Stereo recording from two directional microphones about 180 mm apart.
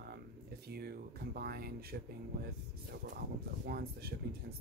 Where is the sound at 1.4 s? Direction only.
60° right (ahead or behind).